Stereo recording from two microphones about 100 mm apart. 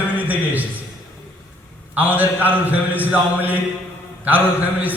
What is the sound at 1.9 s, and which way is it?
A man's voice, 15° right (ahead or behind).